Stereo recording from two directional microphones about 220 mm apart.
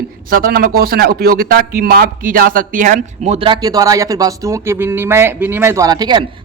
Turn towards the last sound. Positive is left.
turn(degrees=-20)  # may be behind; listen again after turning